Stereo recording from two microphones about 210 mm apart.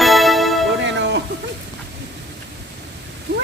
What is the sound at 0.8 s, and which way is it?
Speech, 60° right (ahead or behind).